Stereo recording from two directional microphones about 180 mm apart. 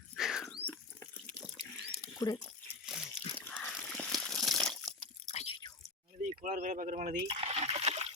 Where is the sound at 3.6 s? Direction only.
5° left (ahead or behind).